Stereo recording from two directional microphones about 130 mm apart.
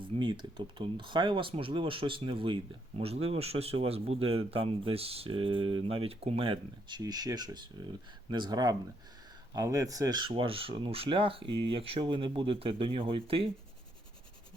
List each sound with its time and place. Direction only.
0.0 s speech: 40° right (ahead or behind)